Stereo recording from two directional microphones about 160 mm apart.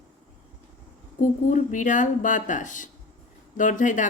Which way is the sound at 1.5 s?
50° left (ahead or behind).